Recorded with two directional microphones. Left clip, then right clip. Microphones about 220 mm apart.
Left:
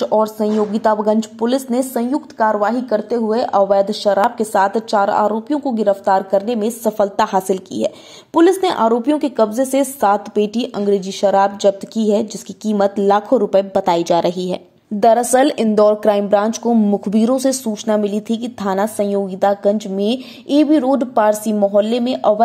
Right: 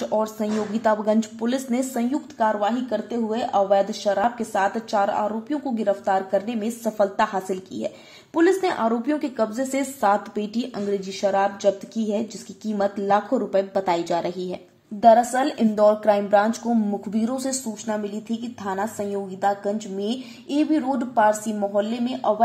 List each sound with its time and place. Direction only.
0.0 s a woman's voice: 25° left (ahead or behind); by 22.3 s 45° left (ahead or behind)